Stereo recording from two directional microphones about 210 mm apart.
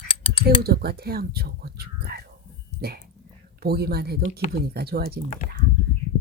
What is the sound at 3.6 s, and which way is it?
Speech, 50° right (ahead or behind).